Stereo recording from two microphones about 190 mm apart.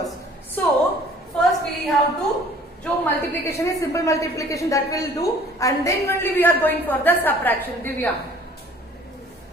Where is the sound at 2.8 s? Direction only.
10° left (ahead or behind).